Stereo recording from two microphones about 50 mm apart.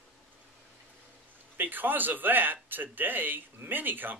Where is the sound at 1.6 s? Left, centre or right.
Right.